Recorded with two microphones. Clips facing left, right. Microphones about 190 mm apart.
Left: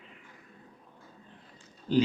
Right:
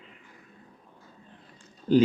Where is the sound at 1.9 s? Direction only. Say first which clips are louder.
Right 5 dB; 50° right (ahead or behind).